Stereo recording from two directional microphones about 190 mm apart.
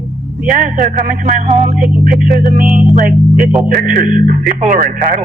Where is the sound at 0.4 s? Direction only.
45° right (ahead or behind).